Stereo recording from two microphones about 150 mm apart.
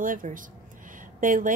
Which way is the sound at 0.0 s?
65° right (ahead or behind).